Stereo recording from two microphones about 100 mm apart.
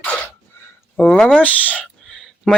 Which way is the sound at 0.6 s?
25° left (ahead or behind).